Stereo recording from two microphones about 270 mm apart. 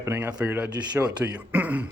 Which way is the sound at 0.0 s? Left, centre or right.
Centre.